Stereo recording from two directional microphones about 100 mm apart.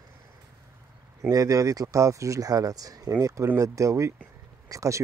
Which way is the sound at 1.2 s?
35° right (ahead or behind).